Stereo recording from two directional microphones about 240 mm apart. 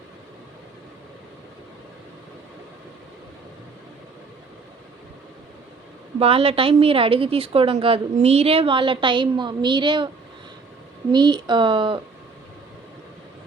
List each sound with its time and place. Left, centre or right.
6.1 s a woman's voice: right
11.1 s a woman's voice: centre